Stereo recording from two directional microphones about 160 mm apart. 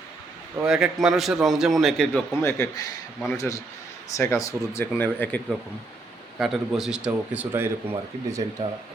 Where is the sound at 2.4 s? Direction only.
15° left (ahead or behind).